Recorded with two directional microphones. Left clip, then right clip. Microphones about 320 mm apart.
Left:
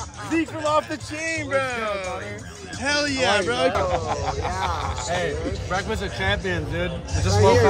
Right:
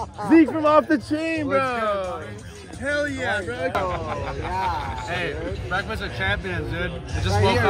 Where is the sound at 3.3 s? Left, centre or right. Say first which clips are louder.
Left 5 dB; left.